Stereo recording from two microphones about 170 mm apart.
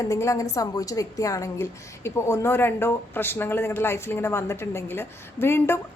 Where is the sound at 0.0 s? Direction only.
20° left (ahead or behind).